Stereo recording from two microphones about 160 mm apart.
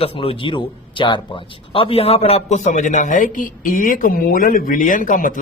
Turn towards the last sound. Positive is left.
turn(degrees=55)  # may be behind; listen again after turning